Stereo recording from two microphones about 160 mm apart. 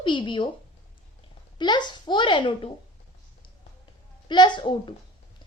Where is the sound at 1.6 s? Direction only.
30° left (ahead or behind).